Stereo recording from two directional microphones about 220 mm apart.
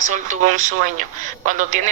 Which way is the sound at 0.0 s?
35° right (ahead or behind).